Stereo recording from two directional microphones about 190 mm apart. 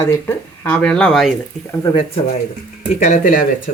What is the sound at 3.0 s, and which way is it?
Speech, 40° left (ahead or behind).